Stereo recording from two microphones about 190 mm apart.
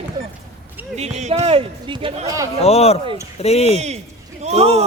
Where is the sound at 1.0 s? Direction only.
35° right (ahead or behind).